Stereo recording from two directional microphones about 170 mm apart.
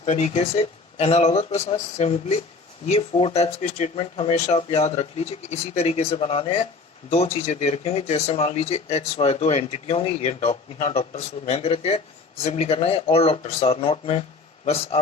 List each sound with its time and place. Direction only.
0.0 s speech: 40° left (ahead or behind)